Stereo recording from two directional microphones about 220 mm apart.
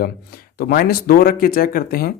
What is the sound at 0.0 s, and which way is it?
Speech, 45° left (ahead or behind).